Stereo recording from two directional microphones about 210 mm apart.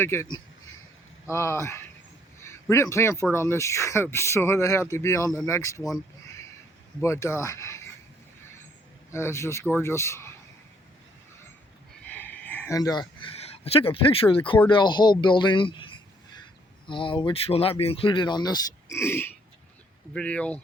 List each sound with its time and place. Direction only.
0.0 s speech: 10° left (ahead or behind)
1.3 s a man's voice: 15° left (ahead or behind)
7.0 s speech: 15° left (ahead or behind)
9.1 s speech: 10° left (ahead or behind)
12.0 s a sound: 10° left (ahead or behind); by 14.6 s 25° left (ahead or behind)
14.7 s speech: 20° left (ahead or behind); by 20.6 s 5° left (ahead or behind)